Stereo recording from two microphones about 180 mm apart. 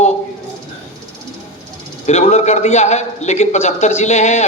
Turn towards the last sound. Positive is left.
turn(degrees=40)  # may be behind; listen again after turning